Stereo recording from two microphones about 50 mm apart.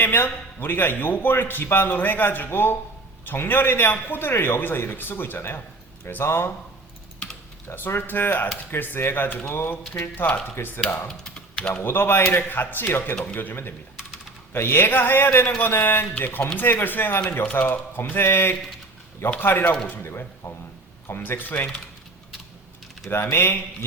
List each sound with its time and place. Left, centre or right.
0.0 s a man's voice: left
7.8 s a man's voice: left
11.1 s typing: centre
11.7 s a man's voice: left
17.4 s a man's voice: left
20.0 s speech: left
21.2 s a man's voice: left
23.0 s a man's voice: left